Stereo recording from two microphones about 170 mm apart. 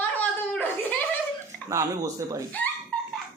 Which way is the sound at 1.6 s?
20° right (ahead or behind).